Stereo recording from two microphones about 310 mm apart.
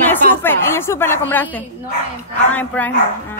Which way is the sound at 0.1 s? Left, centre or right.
Centre.